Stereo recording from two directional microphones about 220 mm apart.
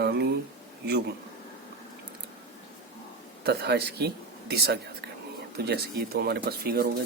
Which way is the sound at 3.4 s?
45° right (ahead or behind).